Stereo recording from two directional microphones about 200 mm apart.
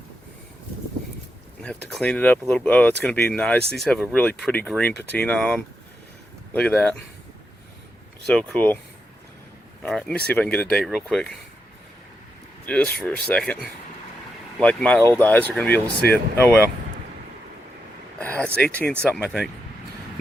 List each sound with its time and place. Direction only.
1.6 s speech: 5° left (ahead or behind)
8.3 s speech: 5° left (ahead or behind)
9.8 s speech: 5° left (ahead or behind)
12.6 s speech: 5° left (ahead or behind)
18.2 s speech: 10° left (ahead or behind)